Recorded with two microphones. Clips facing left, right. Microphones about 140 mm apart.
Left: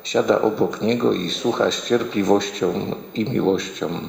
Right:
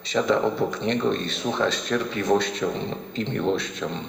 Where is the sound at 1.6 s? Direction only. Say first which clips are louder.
Left 4 dB; 25° left (ahead or behind).